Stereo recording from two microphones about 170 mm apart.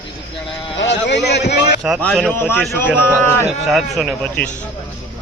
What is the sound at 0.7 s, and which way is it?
Speech, 90° left.